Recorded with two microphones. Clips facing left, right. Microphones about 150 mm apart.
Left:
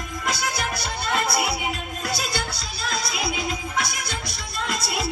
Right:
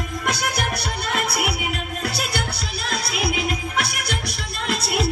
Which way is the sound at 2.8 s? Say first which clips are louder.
Right 2 dB; 65° right (ahead or behind).